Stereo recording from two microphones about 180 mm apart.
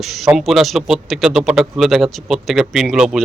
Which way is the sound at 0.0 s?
Centre (ahead or behind).